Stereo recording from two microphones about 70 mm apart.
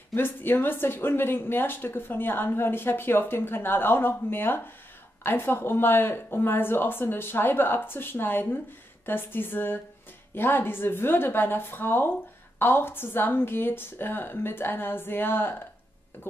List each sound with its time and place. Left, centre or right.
0.1 s speech: left